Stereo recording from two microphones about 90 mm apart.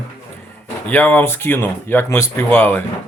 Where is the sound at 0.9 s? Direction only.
20° left (ahead or behind).